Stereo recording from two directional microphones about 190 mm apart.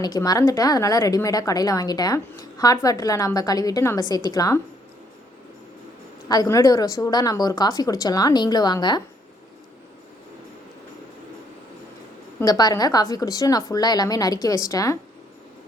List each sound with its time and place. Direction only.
0.0 s a woman's voice: 20° left (ahead or behind)
6.2 s a woman's voice: 20° left (ahead or behind)
12.4 s a woman's voice: 20° left (ahead or behind)